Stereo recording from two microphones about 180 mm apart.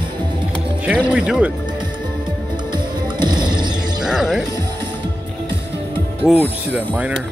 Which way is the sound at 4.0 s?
5° right (ahead or behind).